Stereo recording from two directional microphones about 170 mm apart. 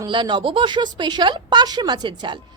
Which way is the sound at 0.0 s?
25° right (ahead or behind).